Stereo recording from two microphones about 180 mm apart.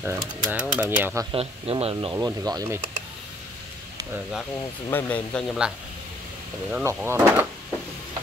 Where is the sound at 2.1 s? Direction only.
20° right (ahead or behind).